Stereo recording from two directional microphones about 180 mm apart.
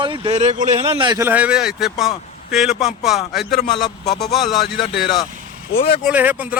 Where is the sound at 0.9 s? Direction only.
25° right (ahead or behind).